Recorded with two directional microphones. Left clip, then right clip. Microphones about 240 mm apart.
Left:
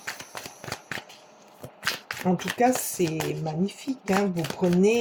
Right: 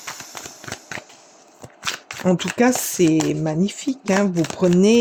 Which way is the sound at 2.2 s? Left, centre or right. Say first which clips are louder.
Right 5 dB; right.